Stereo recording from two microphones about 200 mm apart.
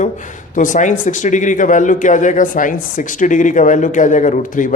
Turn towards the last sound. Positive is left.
turn(degrees=40)  # may be behind; listen again after turning